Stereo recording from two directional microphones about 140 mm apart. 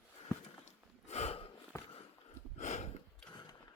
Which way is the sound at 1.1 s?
50° left (ahead or behind).